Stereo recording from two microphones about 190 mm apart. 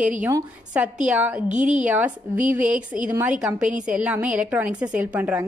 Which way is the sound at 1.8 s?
10° right (ahead or behind).